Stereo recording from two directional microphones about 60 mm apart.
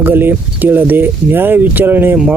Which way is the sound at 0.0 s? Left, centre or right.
Right.